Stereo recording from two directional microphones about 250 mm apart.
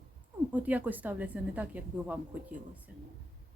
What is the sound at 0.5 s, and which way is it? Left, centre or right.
Speech, centre.